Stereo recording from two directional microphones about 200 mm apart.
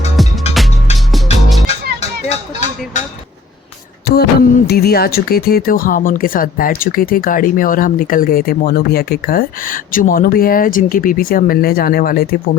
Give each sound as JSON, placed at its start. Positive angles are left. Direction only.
{"t": 0.2, "sound": "music", "side_deg": 0}
{"t": 2.0, "sound": "a sound", "side_deg": 35}
{"t": 4.0, "sound": "speech", "side_deg": 50}